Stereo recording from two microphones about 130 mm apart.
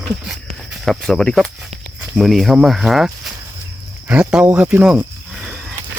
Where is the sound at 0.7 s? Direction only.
5° left (ahead or behind).